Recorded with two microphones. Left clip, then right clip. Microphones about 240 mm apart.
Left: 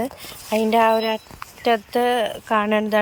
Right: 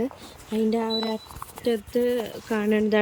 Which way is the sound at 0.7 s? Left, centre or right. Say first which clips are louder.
Left 13 dB; left.